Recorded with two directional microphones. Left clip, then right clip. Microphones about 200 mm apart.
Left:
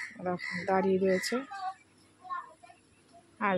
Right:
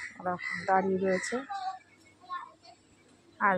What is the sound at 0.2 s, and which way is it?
Speech, 30° left (ahead or behind).